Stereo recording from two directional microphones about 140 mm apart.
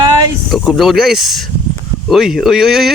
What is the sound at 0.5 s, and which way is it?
Speech, centre (ahead or behind).